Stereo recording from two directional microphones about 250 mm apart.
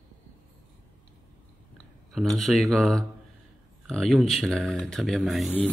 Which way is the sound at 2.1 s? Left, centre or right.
Centre.